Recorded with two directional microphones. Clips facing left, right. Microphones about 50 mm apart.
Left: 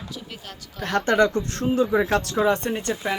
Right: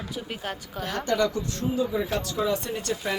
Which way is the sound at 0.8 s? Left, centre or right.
Left.